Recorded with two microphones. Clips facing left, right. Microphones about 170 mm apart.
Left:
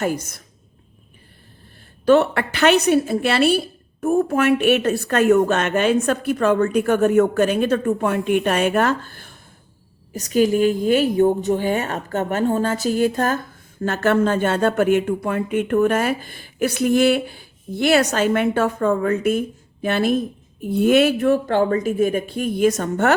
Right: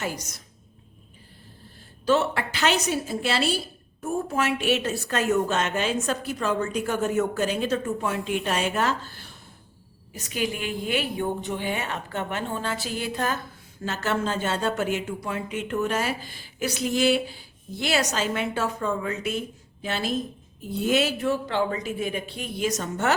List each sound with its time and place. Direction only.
0.0 s a woman's voice: 55° left (ahead or behind)
2.0 s speech: 60° left (ahead or behind)
10.1 s a woman's voice: 40° left (ahead or behind)
13.8 s a woman's voice: 55° left (ahead or behind)